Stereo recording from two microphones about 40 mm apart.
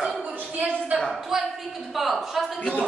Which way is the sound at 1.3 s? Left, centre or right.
Centre.